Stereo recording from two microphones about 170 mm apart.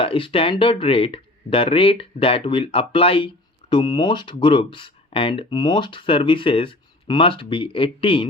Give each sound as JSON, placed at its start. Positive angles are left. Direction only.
{"t": 0.0, "sound": "speech", "side_deg": 30}